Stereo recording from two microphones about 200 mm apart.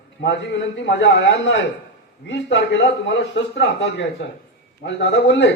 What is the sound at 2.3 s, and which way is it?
Speech, 65° left (ahead or behind).